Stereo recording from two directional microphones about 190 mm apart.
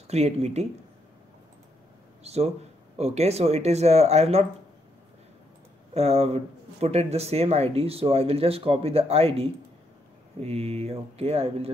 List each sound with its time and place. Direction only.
0.1 s a man's voice: 35° right (ahead or behind)
2.2 s a man's voice: 35° right (ahead or behind)
5.9 s a man's voice: 30° right (ahead or behind)